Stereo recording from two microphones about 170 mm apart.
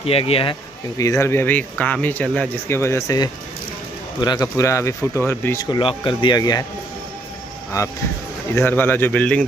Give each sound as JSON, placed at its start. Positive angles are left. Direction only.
{"t": 0.0, "sound": "speech", "side_deg": 35}
{"t": 0.9, "sound": "speech", "side_deg": 15}
{"t": 8.5, "sound": "speech", "side_deg": 10}